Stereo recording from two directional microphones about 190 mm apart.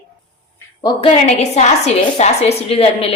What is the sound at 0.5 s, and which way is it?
A woman's voice, 20° left (ahead or behind).